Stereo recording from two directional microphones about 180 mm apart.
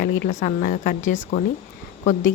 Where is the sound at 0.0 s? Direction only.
50° left (ahead or behind).